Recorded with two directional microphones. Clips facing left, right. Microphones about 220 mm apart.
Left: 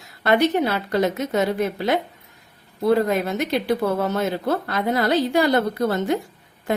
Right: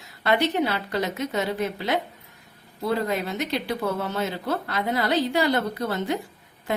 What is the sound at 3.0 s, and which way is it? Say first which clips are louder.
A woman's voice: left 5 dB; 50° left (ahead or behind).